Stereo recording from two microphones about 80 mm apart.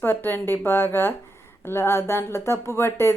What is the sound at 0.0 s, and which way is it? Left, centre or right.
A woman's voice, left.